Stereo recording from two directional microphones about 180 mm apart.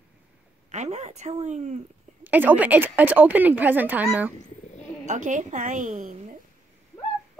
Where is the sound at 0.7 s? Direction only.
40° right (ahead or behind).